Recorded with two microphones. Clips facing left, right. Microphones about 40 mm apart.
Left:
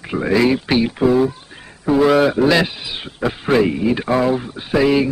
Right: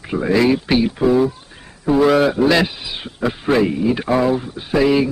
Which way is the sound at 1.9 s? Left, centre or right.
Centre.